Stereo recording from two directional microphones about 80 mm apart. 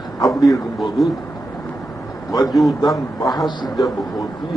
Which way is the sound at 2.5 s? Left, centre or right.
Centre.